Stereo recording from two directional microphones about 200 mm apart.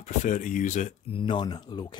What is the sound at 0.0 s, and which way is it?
Speech, 40° left (ahead or behind).